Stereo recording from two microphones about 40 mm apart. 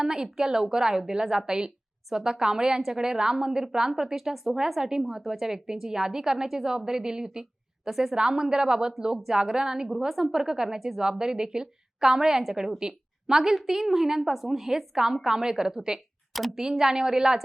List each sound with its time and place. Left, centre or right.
0.0 s a woman's voice: centre
9.1 s a woman's voice: centre